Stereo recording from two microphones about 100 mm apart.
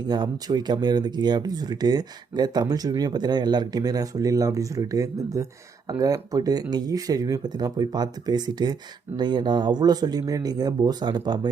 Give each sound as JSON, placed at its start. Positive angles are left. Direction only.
{"t": 0.0, "sound": "speech", "side_deg": -45}